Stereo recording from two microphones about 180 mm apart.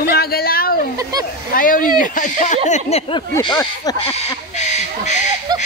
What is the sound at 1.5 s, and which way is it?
Speech, 50° left (ahead or behind).